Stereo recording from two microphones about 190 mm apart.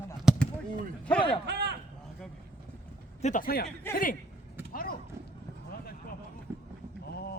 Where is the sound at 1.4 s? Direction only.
60° right (ahead or behind).